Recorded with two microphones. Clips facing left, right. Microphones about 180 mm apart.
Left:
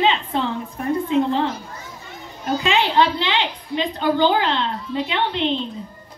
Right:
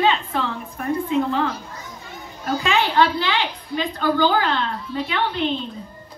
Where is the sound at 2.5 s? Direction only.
20° left (ahead or behind).